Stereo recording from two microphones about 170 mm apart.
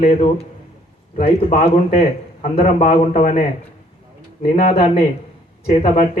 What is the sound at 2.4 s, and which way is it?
A man's voice, 45° left (ahead or behind).